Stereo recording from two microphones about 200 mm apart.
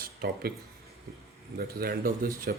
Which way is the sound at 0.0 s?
50° right (ahead or behind).